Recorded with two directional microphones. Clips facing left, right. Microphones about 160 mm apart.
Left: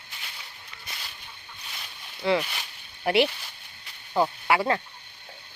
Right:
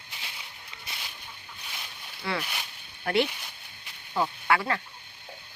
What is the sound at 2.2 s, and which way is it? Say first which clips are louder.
Speech: left 8 dB; 25° left (ahead or behind).